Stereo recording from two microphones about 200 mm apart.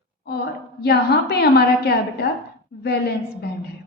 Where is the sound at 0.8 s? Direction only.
55° left (ahead or behind).